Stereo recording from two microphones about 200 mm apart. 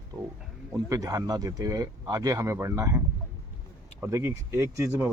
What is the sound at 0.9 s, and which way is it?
Speech, 15° right (ahead or behind).